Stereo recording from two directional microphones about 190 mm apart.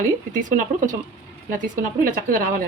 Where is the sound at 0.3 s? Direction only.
45° right (ahead or behind).